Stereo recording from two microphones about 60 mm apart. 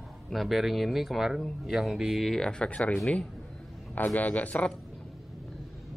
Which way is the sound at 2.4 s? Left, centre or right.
Centre.